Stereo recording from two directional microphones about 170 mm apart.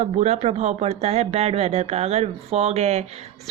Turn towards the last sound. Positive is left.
turn(degrees=-40)  # may be behind; listen again after turning